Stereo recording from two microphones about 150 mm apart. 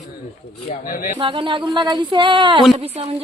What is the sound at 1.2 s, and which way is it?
A woman's voice, 35° right (ahead or behind).